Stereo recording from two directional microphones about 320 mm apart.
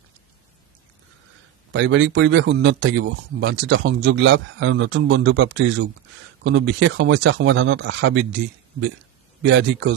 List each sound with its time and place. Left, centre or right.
1.7 s speech: right
9.5 s speech: right